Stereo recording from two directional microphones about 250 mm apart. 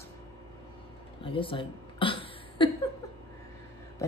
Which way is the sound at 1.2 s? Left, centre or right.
Left.